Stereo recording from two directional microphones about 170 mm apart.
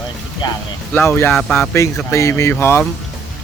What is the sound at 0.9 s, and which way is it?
Speech, 15° left (ahead or behind).